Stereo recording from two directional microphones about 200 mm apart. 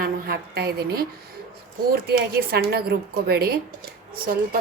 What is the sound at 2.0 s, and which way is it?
A woman's voice, 50° right (ahead or behind).